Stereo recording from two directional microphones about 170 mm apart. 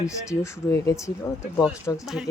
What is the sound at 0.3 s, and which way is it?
Speech, 20° left (ahead or behind).